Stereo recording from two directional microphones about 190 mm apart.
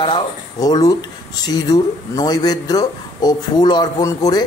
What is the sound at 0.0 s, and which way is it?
Speech, 20° left (ahead or behind).